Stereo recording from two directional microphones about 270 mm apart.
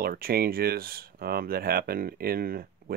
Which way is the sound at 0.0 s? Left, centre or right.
Right.